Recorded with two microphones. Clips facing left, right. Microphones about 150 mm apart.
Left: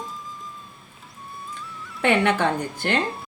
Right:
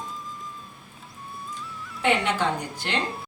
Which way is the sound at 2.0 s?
60° left (ahead or behind).